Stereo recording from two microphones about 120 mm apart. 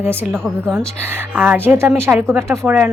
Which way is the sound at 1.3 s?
15° right (ahead or behind).